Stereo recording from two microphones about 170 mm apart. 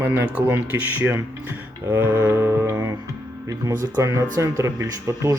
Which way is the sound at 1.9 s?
15° right (ahead or behind).